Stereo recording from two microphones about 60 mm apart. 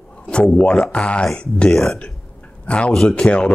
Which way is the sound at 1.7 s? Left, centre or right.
Centre.